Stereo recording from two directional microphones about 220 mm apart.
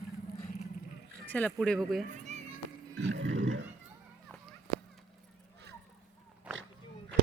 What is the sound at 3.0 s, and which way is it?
Roar, 55° right (ahead or behind).